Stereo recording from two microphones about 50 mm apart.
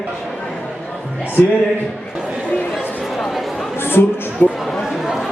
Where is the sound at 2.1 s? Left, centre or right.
Centre.